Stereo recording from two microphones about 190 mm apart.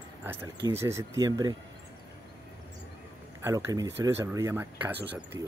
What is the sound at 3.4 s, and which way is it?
Speech, 20° right (ahead or behind).